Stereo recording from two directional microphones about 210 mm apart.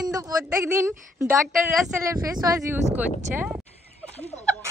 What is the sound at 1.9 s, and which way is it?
Speech, 15° right (ahead or behind).